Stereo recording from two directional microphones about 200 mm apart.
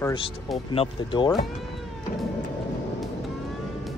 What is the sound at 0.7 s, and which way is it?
Speech, 25° left (ahead or behind).